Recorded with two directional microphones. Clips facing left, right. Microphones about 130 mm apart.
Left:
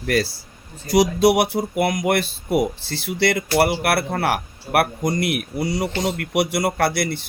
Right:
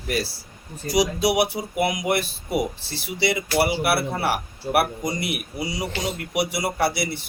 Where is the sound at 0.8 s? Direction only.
50° left (ahead or behind).